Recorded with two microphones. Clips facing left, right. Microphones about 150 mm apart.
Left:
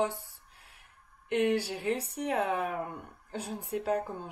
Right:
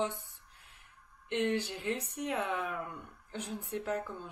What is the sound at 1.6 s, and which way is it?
Speech, 35° left (ahead or behind).